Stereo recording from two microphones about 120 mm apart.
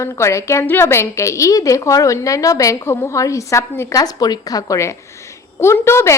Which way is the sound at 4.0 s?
35° left (ahead or behind).